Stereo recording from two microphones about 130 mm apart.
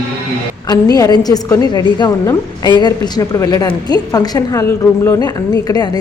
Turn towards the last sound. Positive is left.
turn(degrees=30)  # may be behind; listen again after turning